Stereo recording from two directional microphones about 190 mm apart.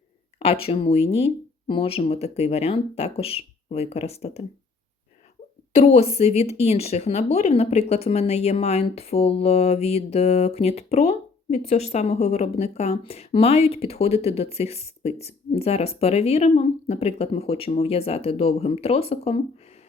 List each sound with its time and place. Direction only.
0.3 s a woman's voice: 30° left (ahead or behind)
5.7 s a woman's voice: 30° left (ahead or behind)